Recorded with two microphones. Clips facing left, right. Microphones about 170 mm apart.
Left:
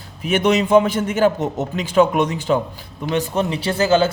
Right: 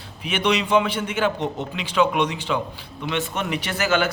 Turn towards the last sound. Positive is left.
turn(degrees=30)  # may be behind; listen again after turning